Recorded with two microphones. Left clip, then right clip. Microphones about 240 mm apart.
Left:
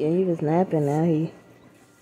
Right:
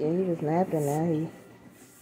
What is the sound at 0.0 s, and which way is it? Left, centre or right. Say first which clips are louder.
Speech: left 5 dB; left.